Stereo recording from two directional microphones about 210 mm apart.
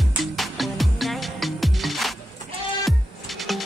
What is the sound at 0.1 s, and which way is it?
Music, centre (ahead or behind).